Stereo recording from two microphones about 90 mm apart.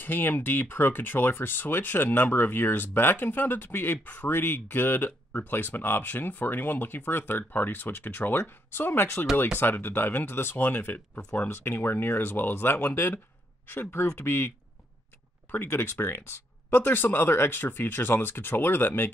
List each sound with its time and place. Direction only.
0.0 s speech: 20° left (ahead or behind)
15.5 s speech: 20° left (ahead or behind)